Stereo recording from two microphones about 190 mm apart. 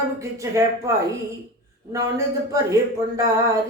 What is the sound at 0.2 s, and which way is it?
Speech, 15° right (ahead or behind).